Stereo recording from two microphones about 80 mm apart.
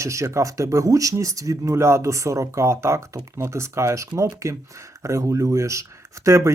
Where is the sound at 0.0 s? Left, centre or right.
Right.